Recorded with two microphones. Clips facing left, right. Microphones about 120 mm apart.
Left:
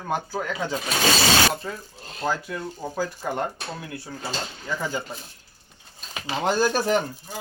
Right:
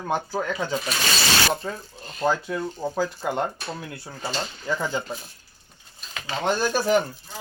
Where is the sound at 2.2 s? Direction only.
20° right (ahead or behind).